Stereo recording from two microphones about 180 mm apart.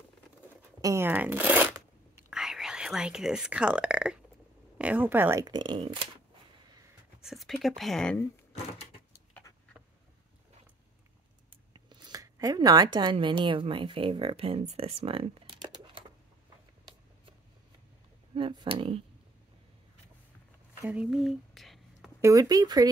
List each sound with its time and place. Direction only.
0.6 s shuffling cards: 15° right (ahead or behind)
2.3 s speech: 5° right (ahead or behind)
5.5 s speech: 25° right (ahead or behind)
7.2 s speech: centre (ahead or behind)
11.7 s speech: 25° right (ahead or behind)
18.3 s speech: 25° right (ahead or behind)
20.8 s a sound: 5° right (ahead or behind)
22.2 s speech: 20° right (ahead or behind)